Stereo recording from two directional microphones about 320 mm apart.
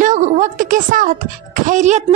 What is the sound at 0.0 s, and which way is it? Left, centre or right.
A woman's voice, right.